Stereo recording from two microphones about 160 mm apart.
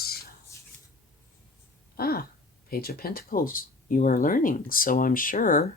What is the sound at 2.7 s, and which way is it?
Speech, 70° left (ahead or behind).